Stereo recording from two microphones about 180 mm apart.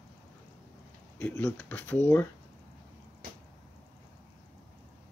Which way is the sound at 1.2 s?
5° left (ahead or behind).